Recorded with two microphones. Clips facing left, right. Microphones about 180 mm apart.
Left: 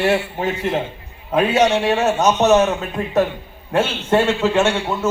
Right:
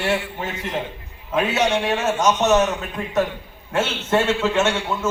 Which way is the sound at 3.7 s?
30° left (ahead or behind).